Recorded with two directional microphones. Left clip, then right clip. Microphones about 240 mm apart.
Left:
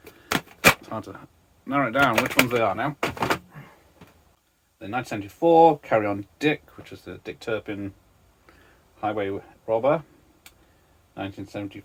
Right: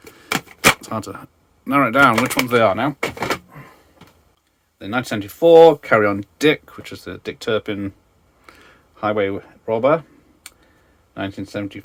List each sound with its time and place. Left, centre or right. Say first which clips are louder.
0.8 s speech: right 7 dB; right
3.0 s door: right 2 dB; centre
4.8 s speech: right 6 dB; right
8.4 s a sound: right 9 dB; right
11.1 s speech: right 7 dB; right